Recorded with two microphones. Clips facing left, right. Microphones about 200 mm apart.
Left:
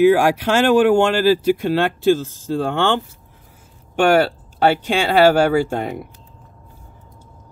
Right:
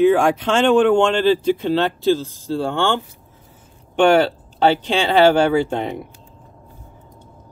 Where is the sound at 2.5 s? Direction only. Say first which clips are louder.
Left 1 dB; 15° left (ahead or behind).